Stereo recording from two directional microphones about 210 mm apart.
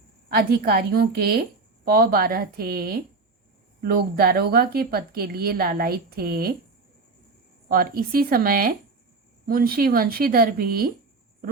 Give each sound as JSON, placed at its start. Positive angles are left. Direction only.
{"t": 0.3, "sound": "a woman's voice", "side_deg": -45}
{"t": 7.7, "sound": "a woman's voice", "side_deg": -45}